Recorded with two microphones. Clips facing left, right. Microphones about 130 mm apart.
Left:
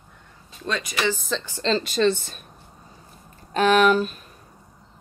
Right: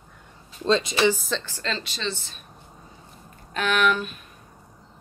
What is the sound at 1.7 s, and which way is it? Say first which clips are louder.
Speech: left 15 dB; 45° left (ahead or behind).